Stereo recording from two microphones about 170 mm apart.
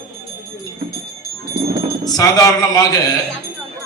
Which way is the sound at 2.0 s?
20° left (ahead or behind).